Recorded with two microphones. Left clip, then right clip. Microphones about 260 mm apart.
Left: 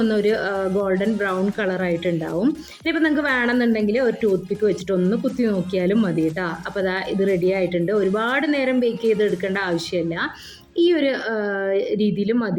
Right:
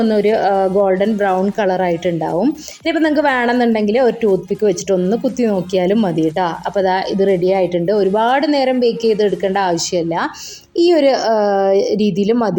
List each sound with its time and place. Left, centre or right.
0.0 s a woman's voice: centre
7.9 s a woman's voice: right
8.3 s a woman's voice: centre
8.5 s a woman's voice: right
9.1 s a woman's voice: centre
10.8 s a woman's voice: centre